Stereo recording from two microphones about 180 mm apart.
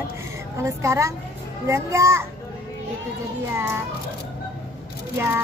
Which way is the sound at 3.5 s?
15° right (ahead or behind).